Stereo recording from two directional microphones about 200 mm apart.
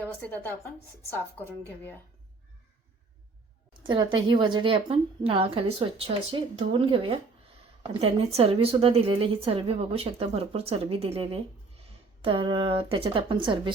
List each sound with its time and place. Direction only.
0.0 s a woman's voice: 10° left (ahead or behind)
3.8 s a woman's voice: 20° right (ahead or behind)